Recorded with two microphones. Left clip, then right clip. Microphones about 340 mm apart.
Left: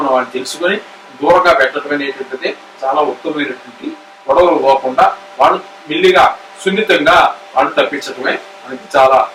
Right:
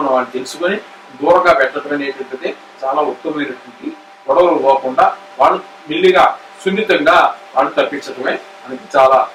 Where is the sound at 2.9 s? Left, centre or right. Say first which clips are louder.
Left 2 dB; right.